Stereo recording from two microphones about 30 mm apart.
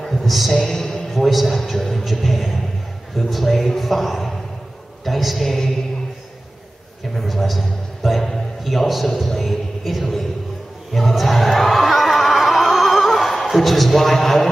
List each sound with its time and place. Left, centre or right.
0.0 s a sound: centre
0.7 s music: centre
1.1 s a man's voice: centre
7.2 s a man's voice: centre
10.9 s music: centre